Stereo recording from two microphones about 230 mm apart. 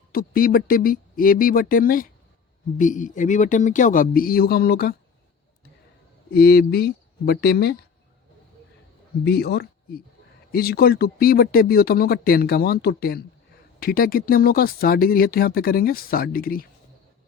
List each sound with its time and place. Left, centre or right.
0.1 s speech: left
6.3 s speech: left
9.2 s speech: left